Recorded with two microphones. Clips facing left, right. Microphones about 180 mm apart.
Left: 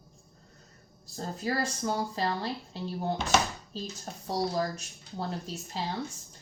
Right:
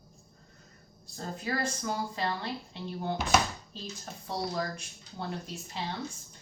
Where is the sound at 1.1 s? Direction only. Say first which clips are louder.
Left 3 dB; 35° left (ahead or behind).